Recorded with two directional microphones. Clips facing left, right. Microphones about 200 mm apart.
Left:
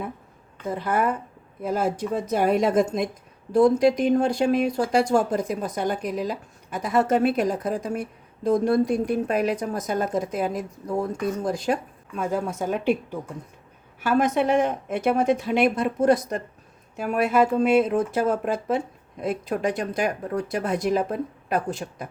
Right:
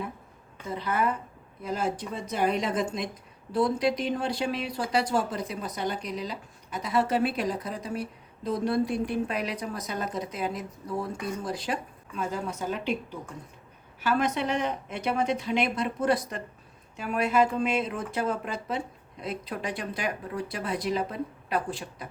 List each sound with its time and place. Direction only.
0.7 s speech: 50° left (ahead or behind)
14.0 s speech: 50° left (ahead or behind)